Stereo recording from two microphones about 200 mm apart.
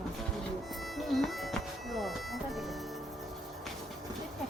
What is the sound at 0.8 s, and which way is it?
Speech, centre (ahead or behind).